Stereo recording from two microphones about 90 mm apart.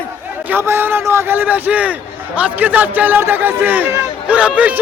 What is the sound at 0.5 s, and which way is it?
A man's voice, 25° right (ahead or behind).